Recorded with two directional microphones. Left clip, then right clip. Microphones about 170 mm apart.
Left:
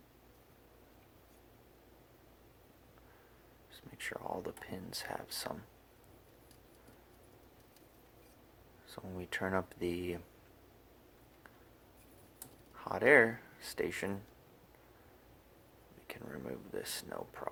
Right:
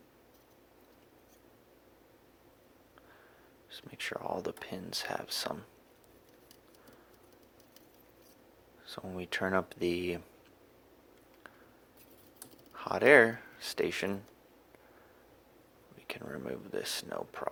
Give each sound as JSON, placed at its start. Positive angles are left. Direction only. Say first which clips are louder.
{"t": 3.7, "sound": "speech", "louder": "right 4 dB", "side_deg": -25}
{"t": 8.9, "sound": "speech", "louder": "right 4 dB", "side_deg": -25}
{"t": 12.7, "sound": "speech", "louder": "right 4 dB", "side_deg": -25}
{"t": 16.0, "sound": "speech", "louder": "right 5 dB", "side_deg": -25}